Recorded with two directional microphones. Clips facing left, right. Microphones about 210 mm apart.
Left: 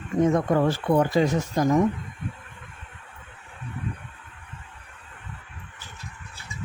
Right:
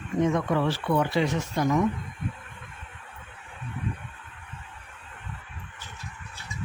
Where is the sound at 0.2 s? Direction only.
45° left (ahead or behind).